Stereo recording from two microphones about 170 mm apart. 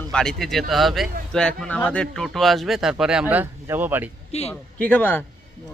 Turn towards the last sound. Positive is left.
turn(degrees=10)  # may be behind; listen again after turning